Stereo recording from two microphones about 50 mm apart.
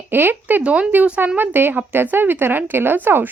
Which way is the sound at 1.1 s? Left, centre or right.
Right.